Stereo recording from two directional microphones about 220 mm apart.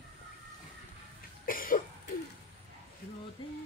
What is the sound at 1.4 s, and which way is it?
Cough, 40° left (ahead or behind).